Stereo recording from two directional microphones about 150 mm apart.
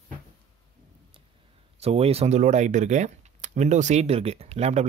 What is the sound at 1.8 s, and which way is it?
Speech, 45° right (ahead or behind).